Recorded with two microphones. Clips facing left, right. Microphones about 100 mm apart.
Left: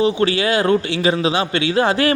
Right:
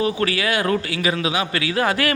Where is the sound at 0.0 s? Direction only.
25° left (ahead or behind).